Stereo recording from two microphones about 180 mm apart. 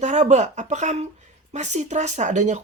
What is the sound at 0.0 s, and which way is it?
Speech, 40° right (ahead or behind).